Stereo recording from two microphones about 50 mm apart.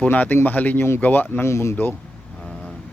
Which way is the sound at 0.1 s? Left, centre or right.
Left.